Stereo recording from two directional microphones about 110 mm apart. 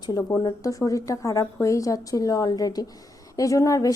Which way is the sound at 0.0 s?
40° left (ahead or behind).